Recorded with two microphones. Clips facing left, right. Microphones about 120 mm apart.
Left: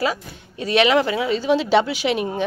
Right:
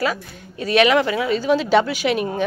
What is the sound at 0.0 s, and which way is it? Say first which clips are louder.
A woman's voice: even; 30° left (ahead or behind).